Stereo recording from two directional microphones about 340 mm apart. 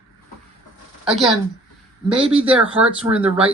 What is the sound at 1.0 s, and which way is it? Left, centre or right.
Speech, centre.